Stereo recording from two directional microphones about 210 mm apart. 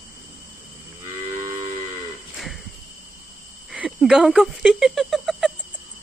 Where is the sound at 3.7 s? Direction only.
5° right (ahead or behind).